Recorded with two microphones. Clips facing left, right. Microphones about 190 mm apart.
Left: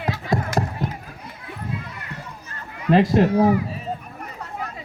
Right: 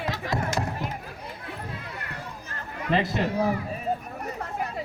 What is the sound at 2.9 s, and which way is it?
Speech, 45° left (ahead or behind).